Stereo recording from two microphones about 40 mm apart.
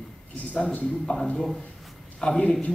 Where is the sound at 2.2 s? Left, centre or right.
Centre.